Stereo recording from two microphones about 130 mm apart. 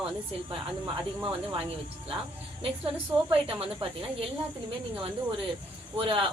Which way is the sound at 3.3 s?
45° right (ahead or behind).